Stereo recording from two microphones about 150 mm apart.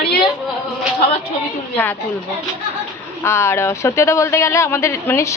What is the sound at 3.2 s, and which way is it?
A man's voice, 15° left (ahead or behind).